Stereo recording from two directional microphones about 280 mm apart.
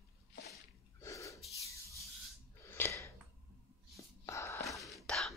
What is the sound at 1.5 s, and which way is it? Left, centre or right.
Sanding, centre.